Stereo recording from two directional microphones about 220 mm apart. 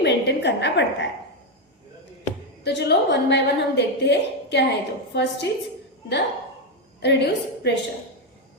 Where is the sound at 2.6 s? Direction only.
50° left (ahead or behind).